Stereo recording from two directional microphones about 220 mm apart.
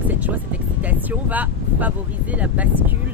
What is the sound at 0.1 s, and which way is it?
Speech, 5° right (ahead or behind).